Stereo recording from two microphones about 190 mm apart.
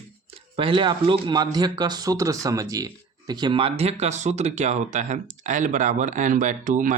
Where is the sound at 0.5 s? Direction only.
25° right (ahead or behind).